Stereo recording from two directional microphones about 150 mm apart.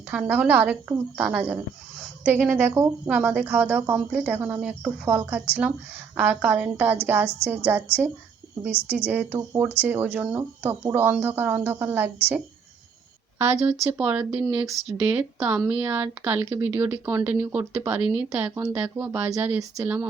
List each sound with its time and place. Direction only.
0.1 s speech: 10° right (ahead or behind)
13.4 s speech: 20° right (ahead or behind)